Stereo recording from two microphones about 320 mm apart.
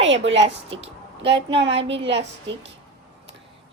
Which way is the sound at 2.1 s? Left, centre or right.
Right.